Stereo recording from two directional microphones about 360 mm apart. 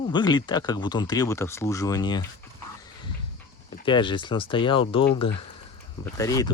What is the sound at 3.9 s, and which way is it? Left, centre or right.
Speech, centre.